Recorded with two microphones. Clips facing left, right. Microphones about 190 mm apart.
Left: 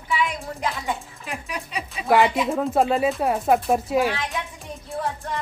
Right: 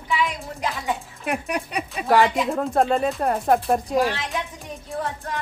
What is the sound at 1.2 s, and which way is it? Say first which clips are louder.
Speech: right 7 dB; 60° right (ahead or behind).